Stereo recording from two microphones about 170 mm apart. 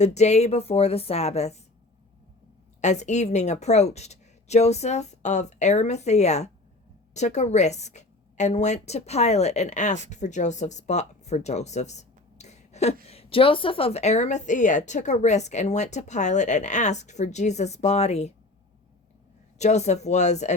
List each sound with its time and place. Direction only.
0.0 s a woman's voice: 40° left (ahead or behind)
2.8 s a woman's voice: 40° left (ahead or behind)
19.5 s a woman's voice: 40° left (ahead or behind)